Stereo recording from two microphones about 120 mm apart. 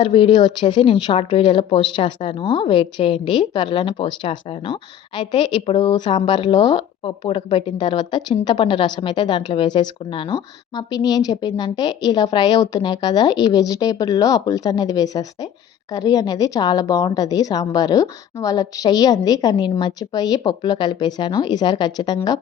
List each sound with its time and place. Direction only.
0.0 s speech: 45° left (ahead or behind)
5.1 s a woman's voice: 40° left (ahead or behind)